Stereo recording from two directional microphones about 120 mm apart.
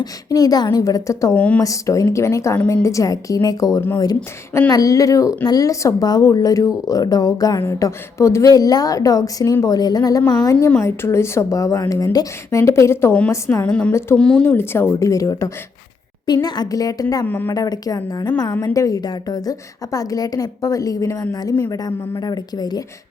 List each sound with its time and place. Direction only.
0.0 s a woman's voice: 30° left (ahead or behind)
1.4 s speech: 10° left (ahead or behind)
1.6 s a woman's voice: 25° left (ahead or behind)
13.7 s speech: 10° left (ahead or behind)
14.5 s a woman's voice: 20° left (ahead or behind)
17.2 s speech: 15° left (ahead or behind)
17.5 s a woman's voice: 30° left (ahead or behind)